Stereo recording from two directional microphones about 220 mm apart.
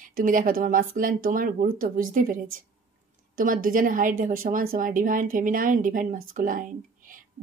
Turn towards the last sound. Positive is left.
turn(degrees=-40)  # may be behind; listen again after turning